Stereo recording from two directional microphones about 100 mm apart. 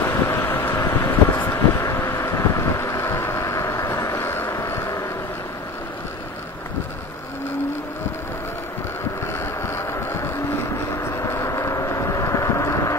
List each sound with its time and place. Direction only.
0.0 s vehicle: 25° left (ahead or behind)
9.2 s vehicle: 25° left (ahead or behind)